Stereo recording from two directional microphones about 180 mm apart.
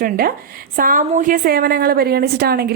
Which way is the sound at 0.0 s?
55° right (ahead or behind).